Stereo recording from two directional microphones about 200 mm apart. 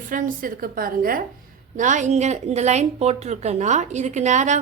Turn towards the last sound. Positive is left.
turn(degrees=-35)  # may be behind; listen again after turning